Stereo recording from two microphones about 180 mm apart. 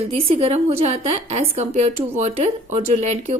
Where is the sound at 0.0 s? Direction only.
35° right (ahead or behind).